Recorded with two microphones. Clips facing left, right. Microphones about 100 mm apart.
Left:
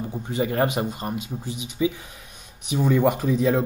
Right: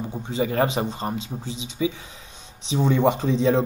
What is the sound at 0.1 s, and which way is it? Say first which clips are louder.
A man's voice: right 1 dB; 20° right (ahead or behind).